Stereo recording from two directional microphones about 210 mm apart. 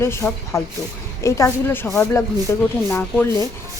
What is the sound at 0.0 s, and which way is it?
Speech, 15° left (ahead or behind).